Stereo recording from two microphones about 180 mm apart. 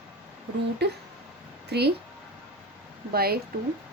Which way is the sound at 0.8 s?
65° right (ahead or behind).